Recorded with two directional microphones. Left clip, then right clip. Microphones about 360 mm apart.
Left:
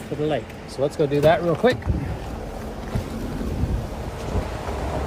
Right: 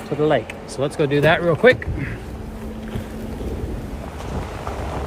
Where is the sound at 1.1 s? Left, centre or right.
Right.